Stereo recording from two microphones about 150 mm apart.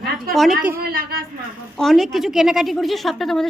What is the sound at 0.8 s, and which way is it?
Speech, 85° right.